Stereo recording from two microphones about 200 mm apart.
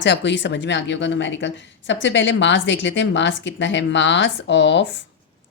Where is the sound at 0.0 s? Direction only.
60° left (ahead or behind).